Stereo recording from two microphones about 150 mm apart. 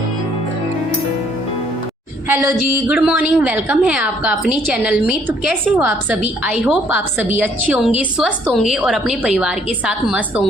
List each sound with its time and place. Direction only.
2.3 s a woman's voice: 15° right (ahead or behind)